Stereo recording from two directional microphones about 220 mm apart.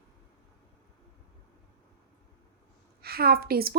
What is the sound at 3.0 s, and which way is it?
Speech, 45° right (ahead or behind).